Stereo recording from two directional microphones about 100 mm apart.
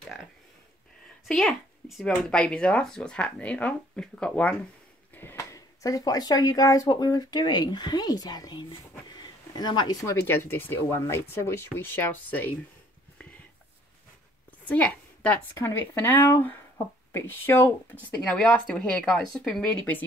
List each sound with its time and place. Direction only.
1.2 s speech: centre (ahead or behind)
5.1 s speech: 25° left (ahead or behind); by 9.9 s 45° left (ahead or behind)
10.0 s speech: 25° left (ahead or behind)
14.7 s a woman's voice: 15° left (ahead or behind)